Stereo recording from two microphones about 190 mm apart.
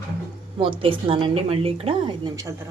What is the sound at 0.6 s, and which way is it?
A woman's voice, 25° right (ahead or behind).